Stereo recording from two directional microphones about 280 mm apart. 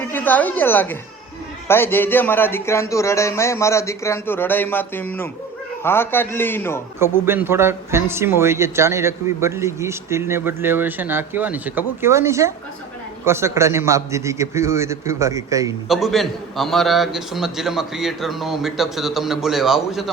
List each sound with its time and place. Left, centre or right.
0.0 s a woman's voice: centre
7.0 s speech: centre
15.9 s a man's voice: centre